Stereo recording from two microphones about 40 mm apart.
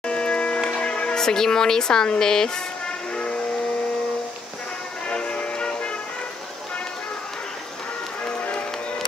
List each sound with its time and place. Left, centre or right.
0.0 s a sound: left
0.7 s music: left
1.1 s speech: centre
5.0 s music: left